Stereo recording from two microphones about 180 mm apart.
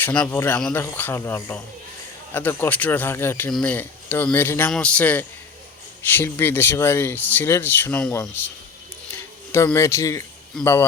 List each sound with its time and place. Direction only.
0.0 s speech: 10° left (ahead or behind)